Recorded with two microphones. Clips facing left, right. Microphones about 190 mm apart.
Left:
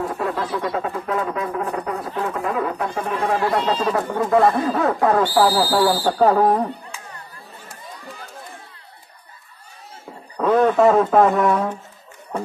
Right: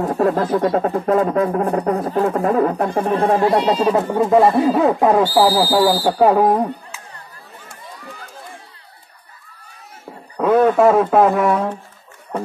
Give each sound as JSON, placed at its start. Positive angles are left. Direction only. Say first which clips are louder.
{"t": 0.2, "sound": "a sound", "louder": "right 11 dB", "side_deg": -45}
{"t": 3.0, "sound": "speech", "louder": "right 6 dB", "side_deg": -30}
{"t": 3.3, "sound": "speech", "louder": "right 5 dB", "side_deg": -20}
{"t": 6.9, "sound": "music", "louder": "even", "side_deg": 0}
{"t": 10.3, "sound": "a man's voice", "louder": "right 2 dB", "side_deg": -5}